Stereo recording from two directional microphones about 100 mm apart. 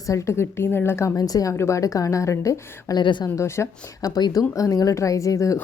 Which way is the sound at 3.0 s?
50° left (ahead or behind).